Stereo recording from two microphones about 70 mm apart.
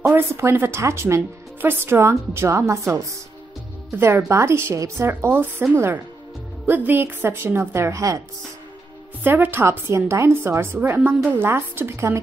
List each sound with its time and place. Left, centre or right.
0.1 s speech: right
9.2 s speech: right